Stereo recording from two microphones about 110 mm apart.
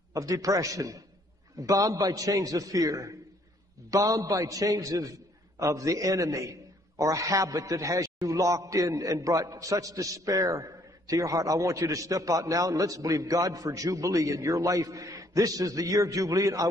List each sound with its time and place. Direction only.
0.1 s a man's voice: 30° right (ahead or behind)